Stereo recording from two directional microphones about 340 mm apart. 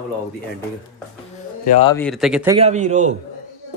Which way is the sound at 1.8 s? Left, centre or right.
Centre.